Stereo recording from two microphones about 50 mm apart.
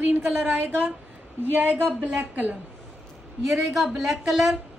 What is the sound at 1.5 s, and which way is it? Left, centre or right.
Speech, right.